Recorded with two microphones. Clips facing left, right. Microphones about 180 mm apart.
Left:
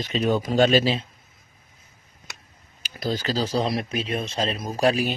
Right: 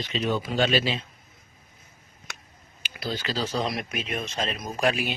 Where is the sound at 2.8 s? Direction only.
40° left (ahead or behind).